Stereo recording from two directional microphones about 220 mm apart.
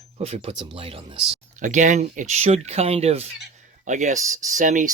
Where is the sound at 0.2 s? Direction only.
30° right (ahead or behind).